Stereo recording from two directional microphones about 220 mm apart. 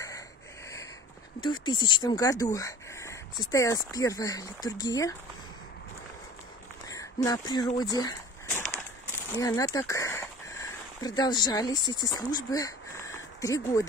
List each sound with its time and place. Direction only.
1.4 s speech: 20° left (ahead or behind)
6.9 s speech: 15° left (ahead or behind)
8.5 s a sound: 5° left (ahead or behind)
9.3 s speech: 15° left (ahead or behind)